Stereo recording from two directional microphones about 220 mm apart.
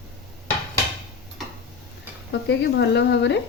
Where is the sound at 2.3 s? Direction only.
50° left (ahead or behind).